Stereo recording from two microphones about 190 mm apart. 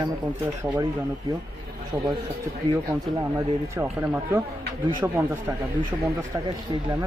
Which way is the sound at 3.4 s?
15° right (ahead or behind).